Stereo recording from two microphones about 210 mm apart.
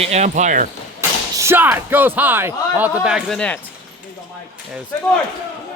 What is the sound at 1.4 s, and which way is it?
Speech, 10° right (ahead or behind).